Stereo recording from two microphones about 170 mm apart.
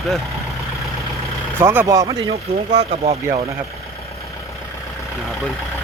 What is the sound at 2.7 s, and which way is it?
Speech, 40° right (ahead or behind).